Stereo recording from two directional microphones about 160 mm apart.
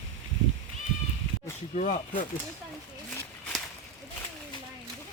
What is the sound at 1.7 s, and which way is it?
Speech, 50° left (ahead or behind).